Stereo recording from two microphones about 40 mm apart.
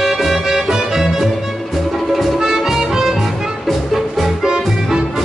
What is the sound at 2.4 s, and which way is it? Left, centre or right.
Music, centre.